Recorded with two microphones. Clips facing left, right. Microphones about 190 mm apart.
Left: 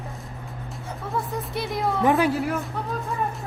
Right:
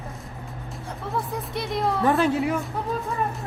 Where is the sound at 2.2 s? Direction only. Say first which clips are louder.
Right 1 dB; centre (ahead or behind).